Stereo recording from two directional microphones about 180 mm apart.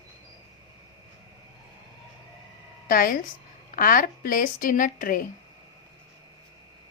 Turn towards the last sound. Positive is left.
turn(degrees=50)  # may be behind; listen again after turning